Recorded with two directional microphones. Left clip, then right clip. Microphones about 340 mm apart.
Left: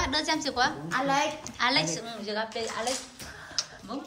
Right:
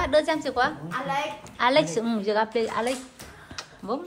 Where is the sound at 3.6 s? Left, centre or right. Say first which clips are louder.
Left 6 dB; centre.